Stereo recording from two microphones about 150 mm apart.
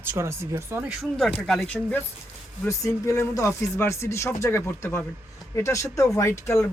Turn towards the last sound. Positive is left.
turn(degrees=20)  # may be behind; listen again after turning